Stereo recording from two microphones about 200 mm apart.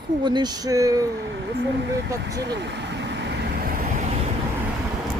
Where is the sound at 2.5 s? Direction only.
60° right (ahead or behind).